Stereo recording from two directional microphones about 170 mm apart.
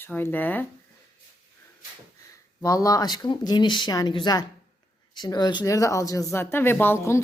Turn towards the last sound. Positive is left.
turn(degrees=15)  # may be behind; listen again after turning